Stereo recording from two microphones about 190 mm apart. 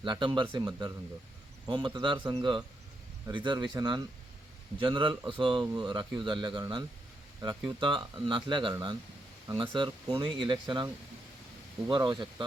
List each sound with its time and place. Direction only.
0.0 s speech: 25° right (ahead or behind)
11.9 s speech: 25° right (ahead or behind)